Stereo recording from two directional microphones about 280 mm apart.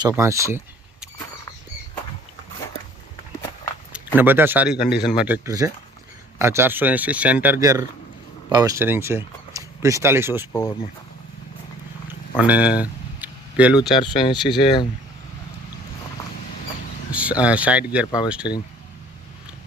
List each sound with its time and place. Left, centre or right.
0.2 s speech: centre
3.9 s speech: centre
10.5 s speech: centre
12.4 s speech: centre
13.9 s speech: centre
17.1 s speech: centre